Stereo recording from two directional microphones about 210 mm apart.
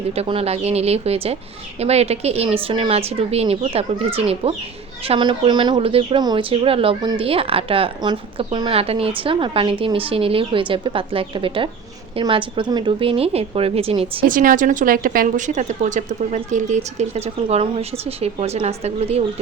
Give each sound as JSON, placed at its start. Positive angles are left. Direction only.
{"t": 0.1, "sound": "speech", "side_deg": -30}
{"t": 14.3, "sound": "a woman's voice", "side_deg": -40}